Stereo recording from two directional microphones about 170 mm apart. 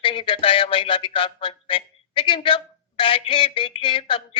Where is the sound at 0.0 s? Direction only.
30° left (ahead or behind).